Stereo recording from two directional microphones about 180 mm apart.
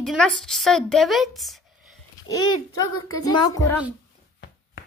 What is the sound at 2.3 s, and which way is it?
A child's voice, 20° left (ahead or behind).